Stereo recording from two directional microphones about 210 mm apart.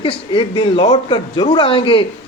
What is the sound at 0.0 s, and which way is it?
A man's voice, 25° left (ahead or behind).